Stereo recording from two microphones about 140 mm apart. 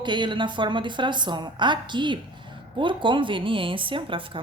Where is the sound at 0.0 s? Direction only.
35° right (ahead or behind).